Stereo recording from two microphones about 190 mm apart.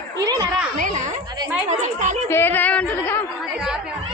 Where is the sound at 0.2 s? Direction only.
20° right (ahead or behind).